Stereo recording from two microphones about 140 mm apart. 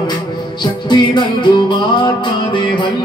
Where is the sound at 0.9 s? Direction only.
35° left (ahead or behind).